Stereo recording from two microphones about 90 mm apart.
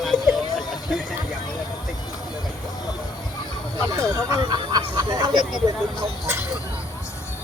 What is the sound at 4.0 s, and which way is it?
Speech, 40° right (ahead or behind).